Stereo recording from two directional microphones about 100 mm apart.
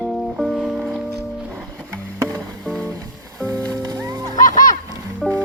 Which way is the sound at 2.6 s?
10° left (ahead or behind).